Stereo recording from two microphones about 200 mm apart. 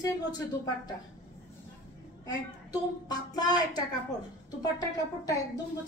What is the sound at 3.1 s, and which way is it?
A woman's voice, 20° left (ahead or behind).